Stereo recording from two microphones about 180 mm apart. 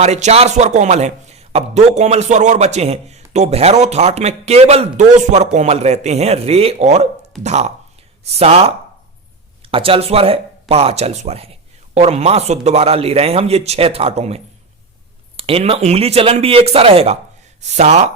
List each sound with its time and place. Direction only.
0.0 s a man's voice: 35° right (ahead or behind)
9.7 s a man's voice: 30° right (ahead or behind)